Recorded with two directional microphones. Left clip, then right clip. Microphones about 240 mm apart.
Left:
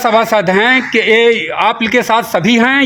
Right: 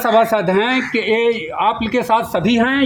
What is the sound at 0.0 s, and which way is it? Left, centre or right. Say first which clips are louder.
Speech: left 3 dB; left.